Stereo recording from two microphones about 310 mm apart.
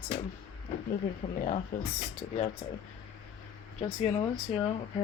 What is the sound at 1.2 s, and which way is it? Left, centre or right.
Speech, centre.